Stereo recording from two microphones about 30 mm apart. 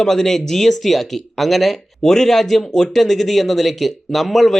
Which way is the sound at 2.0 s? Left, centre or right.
Centre.